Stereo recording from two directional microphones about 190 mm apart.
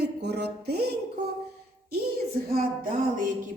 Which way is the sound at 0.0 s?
60° right (ahead or behind).